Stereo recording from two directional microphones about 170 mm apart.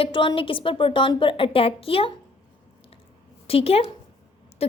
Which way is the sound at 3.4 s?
35° left (ahead or behind).